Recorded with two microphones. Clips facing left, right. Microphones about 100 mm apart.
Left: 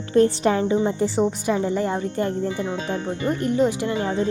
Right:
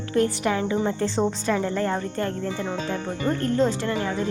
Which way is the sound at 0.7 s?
15° left (ahead or behind).